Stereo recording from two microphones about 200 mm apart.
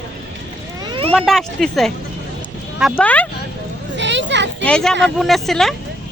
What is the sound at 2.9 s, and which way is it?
Speech, 5° left (ahead or behind).